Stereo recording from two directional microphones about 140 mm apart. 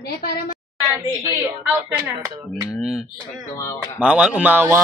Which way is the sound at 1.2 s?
20° right (ahead or behind).